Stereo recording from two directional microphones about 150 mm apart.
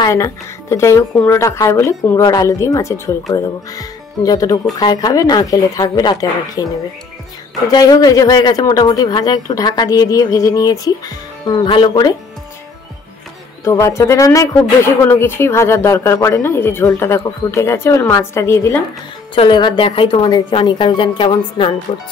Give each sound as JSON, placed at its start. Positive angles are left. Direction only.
{"t": 0.0, "sound": "speech", "side_deg": 20}
{"t": 13.7, "sound": "speech", "side_deg": 20}
{"t": 19.3, "sound": "a woman's voice", "side_deg": 35}